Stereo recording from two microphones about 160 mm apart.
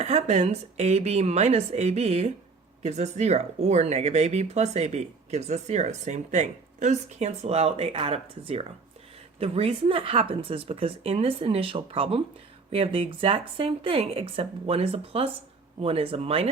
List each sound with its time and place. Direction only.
0.0 s speech: 40° right (ahead or behind)